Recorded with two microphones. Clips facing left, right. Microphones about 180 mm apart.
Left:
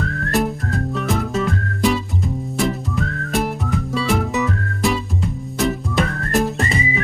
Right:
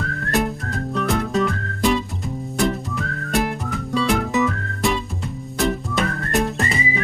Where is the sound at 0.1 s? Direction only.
Centre (ahead or behind).